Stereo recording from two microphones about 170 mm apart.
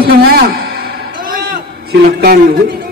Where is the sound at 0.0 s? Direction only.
65° right (ahead or behind).